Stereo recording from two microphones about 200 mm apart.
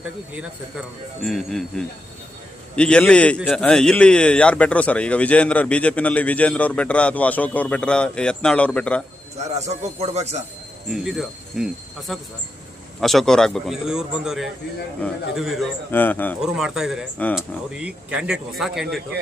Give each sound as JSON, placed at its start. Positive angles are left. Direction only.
{"t": 0.0, "sound": "a man's voice", "side_deg": -5}
{"t": 9.6, "sound": "speech", "side_deg": -35}
{"t": 10.8, "sound": "speech", "side_deg": 0}
{"t": 15.9, "sound": "a man's voice", "side_deg": 10}
{"t": 16.4, "sound": "speech", "side_deg": -5}